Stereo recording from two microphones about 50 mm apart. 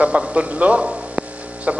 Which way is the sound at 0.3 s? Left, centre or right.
Right.